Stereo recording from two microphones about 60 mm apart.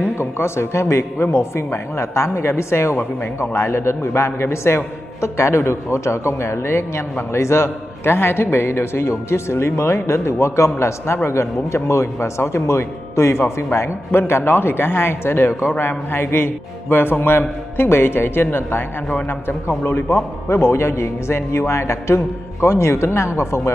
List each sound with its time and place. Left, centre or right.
0.2 s a man's voice: left